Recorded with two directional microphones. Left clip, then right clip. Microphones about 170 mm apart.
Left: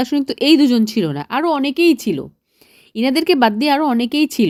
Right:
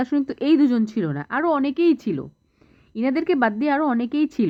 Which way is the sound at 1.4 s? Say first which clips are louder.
Left 4 dB; 15° left (ahead or behind).